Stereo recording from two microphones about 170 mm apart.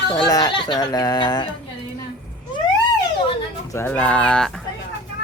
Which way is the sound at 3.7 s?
15° left (ahead or behind).